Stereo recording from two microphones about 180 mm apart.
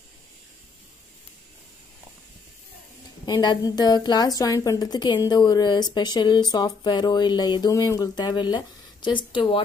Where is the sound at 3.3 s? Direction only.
25° left (ahead or behind).